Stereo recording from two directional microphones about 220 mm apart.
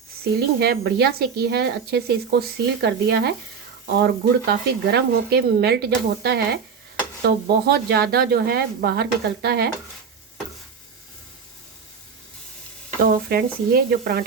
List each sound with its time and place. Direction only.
0.3 s speech: 45° right (ahead or behind)
13.0 s speech: 45° right (ahead or behind)